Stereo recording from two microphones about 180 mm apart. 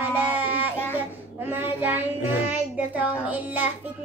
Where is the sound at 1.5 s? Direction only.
10° right (ahead or behind).